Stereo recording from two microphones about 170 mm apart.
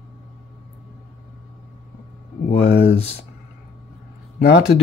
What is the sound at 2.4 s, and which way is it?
Speech, 40° left (ahead or behind).